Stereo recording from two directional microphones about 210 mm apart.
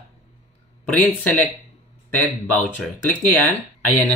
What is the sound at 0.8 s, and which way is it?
Speech, 5° left (ahead or behind).